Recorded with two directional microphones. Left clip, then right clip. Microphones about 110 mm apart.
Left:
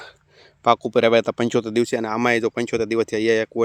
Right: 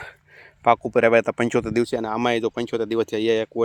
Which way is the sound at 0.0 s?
25° left (ahead or behind).